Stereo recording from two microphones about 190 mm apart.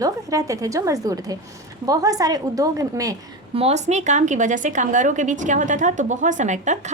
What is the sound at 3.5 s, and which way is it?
Speech, 35° right (ahead or behind).